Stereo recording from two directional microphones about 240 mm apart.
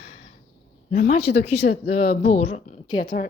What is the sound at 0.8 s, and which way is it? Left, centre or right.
Speech, left.